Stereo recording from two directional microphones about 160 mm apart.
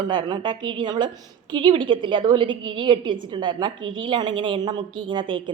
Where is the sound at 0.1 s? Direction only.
25° right (ahead or behind).